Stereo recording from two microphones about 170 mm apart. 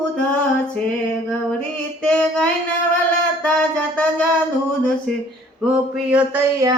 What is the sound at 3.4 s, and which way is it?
Music, 5° left (ahead or behind).